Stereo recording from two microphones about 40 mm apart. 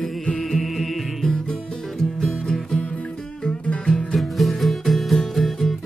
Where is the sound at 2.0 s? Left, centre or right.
Centre.